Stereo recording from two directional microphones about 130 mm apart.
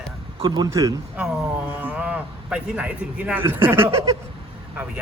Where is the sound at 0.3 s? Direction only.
35° right (ahead or behind).